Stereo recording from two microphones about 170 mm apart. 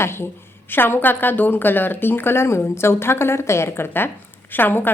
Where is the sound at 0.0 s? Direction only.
15° left (ahead or behind).